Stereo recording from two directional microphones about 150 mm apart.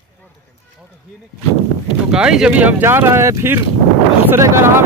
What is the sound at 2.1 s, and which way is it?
Speech, 5° right (ahead or behind).